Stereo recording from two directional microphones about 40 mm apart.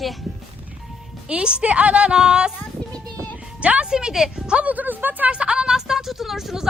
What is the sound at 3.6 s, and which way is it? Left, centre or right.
Speech, right.